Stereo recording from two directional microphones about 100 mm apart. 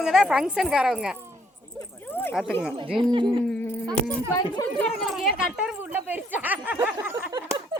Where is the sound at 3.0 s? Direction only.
55° right (ahead or behind).